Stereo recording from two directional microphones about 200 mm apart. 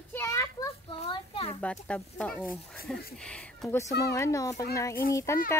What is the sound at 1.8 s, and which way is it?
A child's voice, 5° left (ahead or behind).